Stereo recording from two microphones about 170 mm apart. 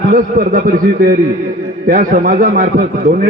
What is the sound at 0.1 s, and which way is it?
Speech, 55° right (ahead or behind).